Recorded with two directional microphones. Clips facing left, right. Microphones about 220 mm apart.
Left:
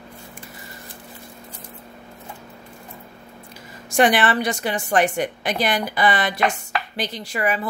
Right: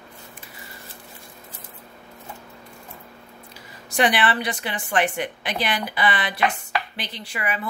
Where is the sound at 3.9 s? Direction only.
45° left (ahead or behind).